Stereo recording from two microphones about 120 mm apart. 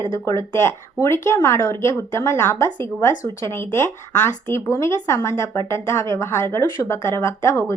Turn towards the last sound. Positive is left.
turn(degrees=20)  # may be behind; listen again after turning